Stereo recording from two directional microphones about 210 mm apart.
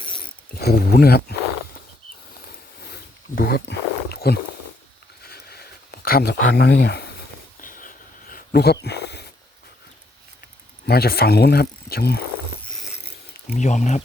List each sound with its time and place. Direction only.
0.6 s speech: 45° left (ahead or behind)
2.8 s wild animals: 50° left (ahead or behind)
5.2 s a sound: 50° left (ahead or behind)
10.8 s speech: 50° left (ahead or behind)
13.6 s speech: 35° left (ahead or behind)